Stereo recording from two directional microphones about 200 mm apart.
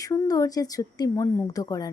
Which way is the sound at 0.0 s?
15° left (ahead or behind).